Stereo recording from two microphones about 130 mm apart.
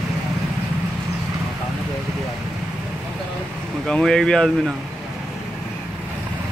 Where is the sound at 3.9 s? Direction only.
5° left (ahead or behind).